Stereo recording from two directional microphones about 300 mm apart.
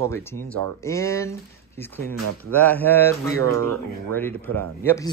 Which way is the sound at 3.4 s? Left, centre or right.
Right.